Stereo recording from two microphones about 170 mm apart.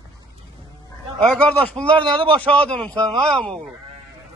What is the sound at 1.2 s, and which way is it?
A man's voice, 5° left (ahead or behind).